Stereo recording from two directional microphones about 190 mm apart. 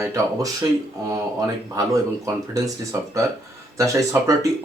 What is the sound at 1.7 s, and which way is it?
Speech, 20° right (ahead or behind).